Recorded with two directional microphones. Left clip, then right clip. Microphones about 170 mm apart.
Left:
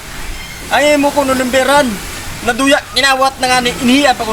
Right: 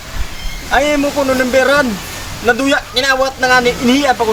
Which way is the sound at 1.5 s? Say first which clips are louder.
Left 2 dB; 20° right (ahead or behind).